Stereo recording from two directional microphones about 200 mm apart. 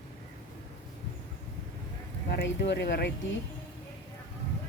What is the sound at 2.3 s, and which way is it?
Speech, 55° left (ahead or behind).